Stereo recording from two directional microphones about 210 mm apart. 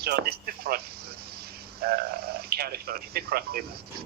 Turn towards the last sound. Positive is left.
turn(degrees=-45)  # may be behind; listen again after turning